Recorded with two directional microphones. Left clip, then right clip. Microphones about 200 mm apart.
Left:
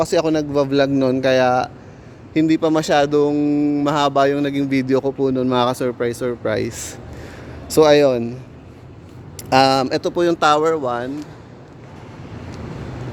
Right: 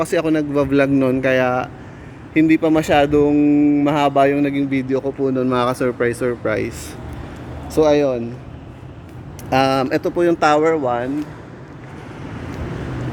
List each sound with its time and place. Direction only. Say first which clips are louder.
0.0 s a man's voice: left 1 dB; 20° left (ahead or behind)
4.5 s speech: left 1 dB; 40° left (ahead or behind); by 5.1 s 60° left (ahead or behind)
5.2 s speech: even; 30° left (ahead or behind)
5.9 s a man's voice: right 2 dB; 10° left (ahead or behind)
6.4 s speech: even; 30° left (ahead or behind); by 8.3 s 45° left (ahead or behind)
9.5 s a man's voice: left 2 dB; 30° left (ahead or behind); by 11.3 s 15° left (ahead or behind)